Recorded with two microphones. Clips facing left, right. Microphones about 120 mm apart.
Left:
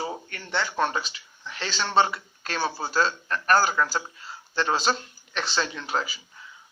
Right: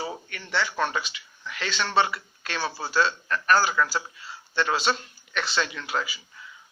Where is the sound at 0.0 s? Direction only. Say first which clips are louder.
Left 1 dB; 30° left (ahead or behind).